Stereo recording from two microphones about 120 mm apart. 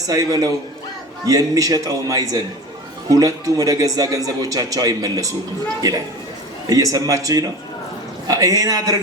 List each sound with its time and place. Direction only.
0.1 s a man's voice: 30° right (ahead or behind)
6.7 s a man's voice: 30° right (ahead or behind)